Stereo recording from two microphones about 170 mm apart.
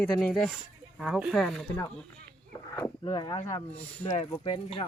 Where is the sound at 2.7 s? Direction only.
20° left (ahead or behind).